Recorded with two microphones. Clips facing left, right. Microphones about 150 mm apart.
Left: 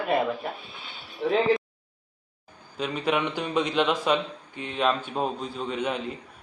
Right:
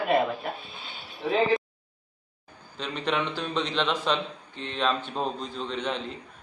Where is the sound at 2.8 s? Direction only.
10° left (ahead or behind).